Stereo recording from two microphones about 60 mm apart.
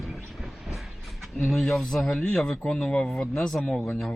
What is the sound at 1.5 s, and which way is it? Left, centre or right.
Speech, centre.